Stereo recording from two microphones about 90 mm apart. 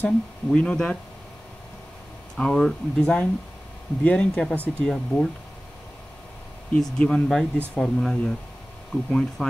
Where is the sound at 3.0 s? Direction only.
15° left (ahead or behind).